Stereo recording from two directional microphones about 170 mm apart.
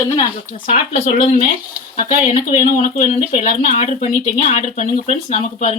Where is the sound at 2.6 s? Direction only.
55° left (ahead or behind).